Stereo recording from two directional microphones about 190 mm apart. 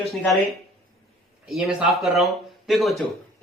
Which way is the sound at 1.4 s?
Centre (ahead or behind).